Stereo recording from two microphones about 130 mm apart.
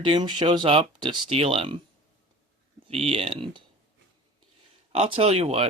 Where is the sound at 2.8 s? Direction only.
50° right (ahead or behind).